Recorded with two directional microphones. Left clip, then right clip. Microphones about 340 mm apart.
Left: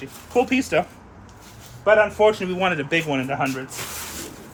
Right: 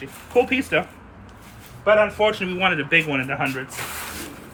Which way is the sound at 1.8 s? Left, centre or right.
Left.